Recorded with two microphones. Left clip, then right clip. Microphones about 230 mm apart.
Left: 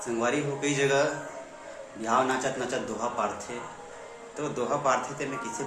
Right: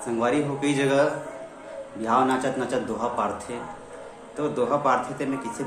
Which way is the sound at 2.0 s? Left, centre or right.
Centre.